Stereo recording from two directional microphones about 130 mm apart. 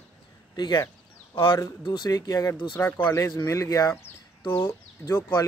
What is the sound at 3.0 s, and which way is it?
Speech, 20° left (ahead or behind).